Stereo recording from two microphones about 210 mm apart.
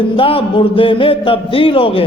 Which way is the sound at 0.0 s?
25° left (ahead or behind).